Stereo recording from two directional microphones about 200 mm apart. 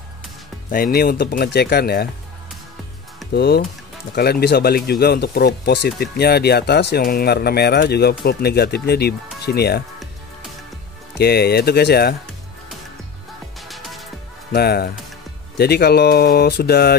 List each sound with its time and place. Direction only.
0.7 s speech: 45° left (ahead or behind)
3.3 s speech: 55° left (ahead or behind)
11.1 s speech: 55° left (ahead or behind)
13.6 s music: centre (ahead or behind)
14.5 s speech: 50° left (ahead or behind)